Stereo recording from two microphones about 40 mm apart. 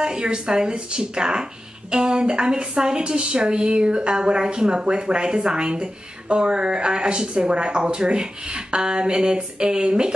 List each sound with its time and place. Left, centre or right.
0.0 s a woman's voice: right